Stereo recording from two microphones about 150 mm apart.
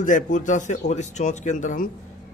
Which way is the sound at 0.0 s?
60° left (ahead or behind).